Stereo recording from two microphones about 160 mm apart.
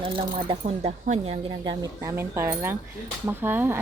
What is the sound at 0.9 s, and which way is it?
Speech, 45° right (ahead or behind).